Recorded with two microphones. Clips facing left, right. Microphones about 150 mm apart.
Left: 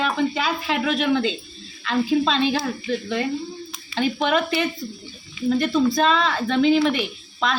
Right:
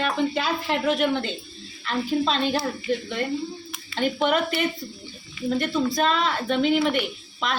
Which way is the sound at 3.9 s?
90° left.